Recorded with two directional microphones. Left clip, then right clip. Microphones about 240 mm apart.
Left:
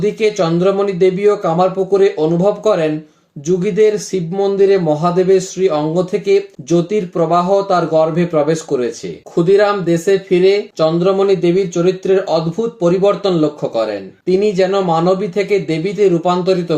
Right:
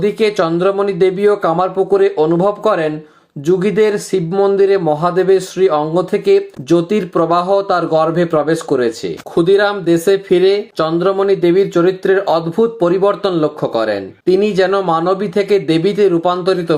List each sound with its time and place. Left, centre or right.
0.0 s speech: right